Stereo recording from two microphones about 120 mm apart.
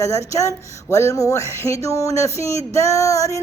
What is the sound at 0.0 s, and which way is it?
A woman's voice, 25° left (ahead or behind).